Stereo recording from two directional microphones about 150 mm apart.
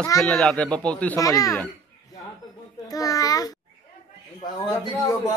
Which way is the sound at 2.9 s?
25° left (ahead or behind).